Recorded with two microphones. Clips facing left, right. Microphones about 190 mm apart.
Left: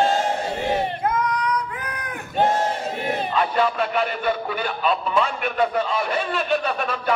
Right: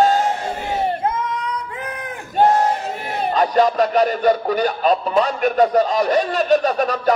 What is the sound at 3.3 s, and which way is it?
Speech, 40° right (ahead or behind).